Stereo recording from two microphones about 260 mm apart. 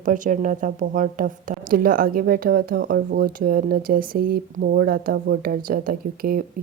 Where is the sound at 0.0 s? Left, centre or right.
Right.